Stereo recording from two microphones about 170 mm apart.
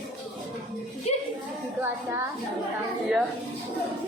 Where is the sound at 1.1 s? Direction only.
40° left (ahead or behind).